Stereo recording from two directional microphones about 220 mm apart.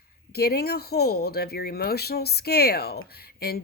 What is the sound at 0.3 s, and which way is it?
Speech, 45° left (ahead or behind).